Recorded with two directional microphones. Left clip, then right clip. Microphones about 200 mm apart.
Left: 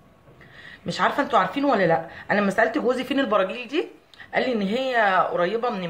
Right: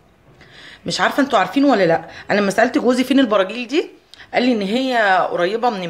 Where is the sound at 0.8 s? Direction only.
50° right (ahead or behind).